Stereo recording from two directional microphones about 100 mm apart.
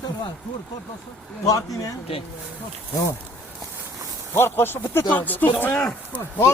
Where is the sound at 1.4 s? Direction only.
35° left (ahead or behind).